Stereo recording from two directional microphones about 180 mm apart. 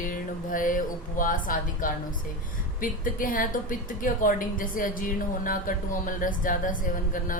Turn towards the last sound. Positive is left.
turn(degrees=50)  # may be behind; listen again after turning